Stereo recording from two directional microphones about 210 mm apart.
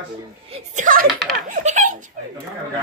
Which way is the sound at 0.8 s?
40° right (ahead or behind).